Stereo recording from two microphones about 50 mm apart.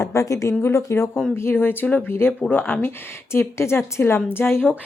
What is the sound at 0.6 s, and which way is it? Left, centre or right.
Speech, left.